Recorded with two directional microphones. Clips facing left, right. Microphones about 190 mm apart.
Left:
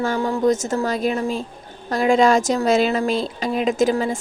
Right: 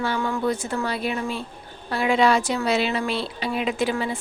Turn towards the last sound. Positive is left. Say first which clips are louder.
# left 6 dB
turn(degrees=45)  # may be behind; listen again after turning